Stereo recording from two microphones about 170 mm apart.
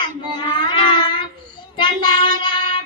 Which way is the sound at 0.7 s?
30° left (ahead or behind).